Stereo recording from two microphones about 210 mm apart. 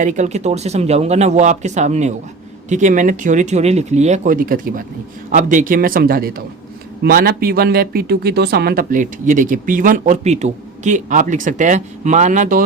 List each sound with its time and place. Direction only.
0.0 s speech: 35° right (ahead or behind)